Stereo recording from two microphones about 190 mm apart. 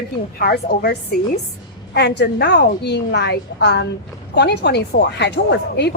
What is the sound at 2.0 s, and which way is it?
Speech, 60° left (ahead or behind).